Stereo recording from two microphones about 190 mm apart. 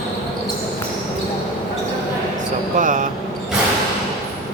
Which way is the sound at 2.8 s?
45° right (ahead or behind).